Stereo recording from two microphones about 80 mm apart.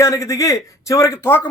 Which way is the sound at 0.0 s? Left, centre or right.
Left.